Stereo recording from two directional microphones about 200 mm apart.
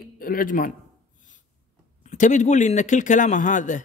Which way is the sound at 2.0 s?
35° left (ahead or behind).